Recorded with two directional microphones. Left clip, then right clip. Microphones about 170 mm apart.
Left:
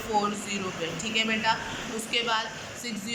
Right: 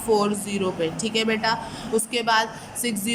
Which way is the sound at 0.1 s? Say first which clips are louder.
Right 6 dB; 70° right (ahead or behind).